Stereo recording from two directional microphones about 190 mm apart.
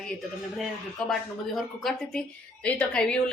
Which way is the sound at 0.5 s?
Centre (ahead or behind).